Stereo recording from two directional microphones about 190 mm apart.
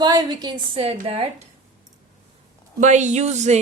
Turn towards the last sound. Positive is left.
turn(degrees=-35)  # may be behind; listen again after turning